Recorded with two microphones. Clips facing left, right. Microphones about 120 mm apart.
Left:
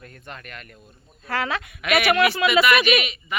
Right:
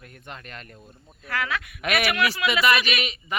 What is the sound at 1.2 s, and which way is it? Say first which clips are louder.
A woman's voice: left 3 dB; 30° left (ahead or behind).